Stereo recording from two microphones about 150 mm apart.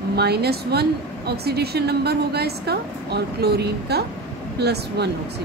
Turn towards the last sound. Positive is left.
turn(degrees=-90)